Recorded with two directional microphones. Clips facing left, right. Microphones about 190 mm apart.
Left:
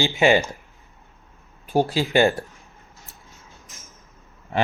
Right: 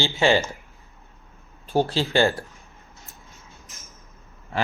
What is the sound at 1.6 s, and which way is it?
Speech, 15° left (ahead or behind).